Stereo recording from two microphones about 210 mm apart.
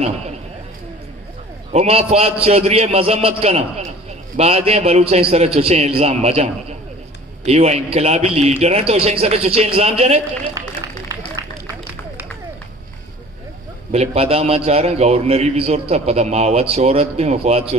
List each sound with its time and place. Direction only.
1.7 s a man's voice: 30° right (ahead or behind)
11.1 s run: 15° right (ahead or behind)
13.9 s a man's voice: 30° right (ahead or behind)